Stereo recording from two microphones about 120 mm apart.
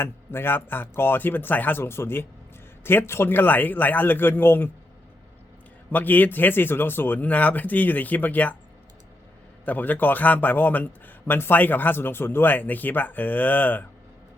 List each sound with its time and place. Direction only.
0.0 s a man's voice: 20° left (ahead or behind)
5.9 s a man's voice: 15° left (ahead or behind)
9.6 s a man's voice: 15° left (ahead or behind)